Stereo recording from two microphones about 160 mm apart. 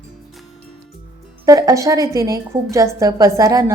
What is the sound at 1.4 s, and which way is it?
A woman's voice, 20° right (ahead or behind).